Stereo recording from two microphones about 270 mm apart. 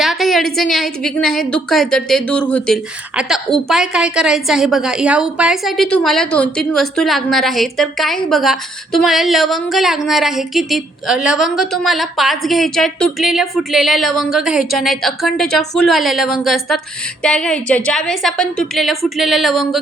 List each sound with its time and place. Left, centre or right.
0.0 s a woman's voice: centre